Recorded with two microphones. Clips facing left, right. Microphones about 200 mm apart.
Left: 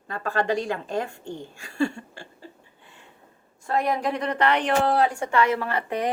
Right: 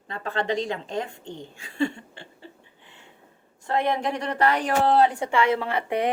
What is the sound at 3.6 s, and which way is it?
Speech, 25° right (ahead or behind).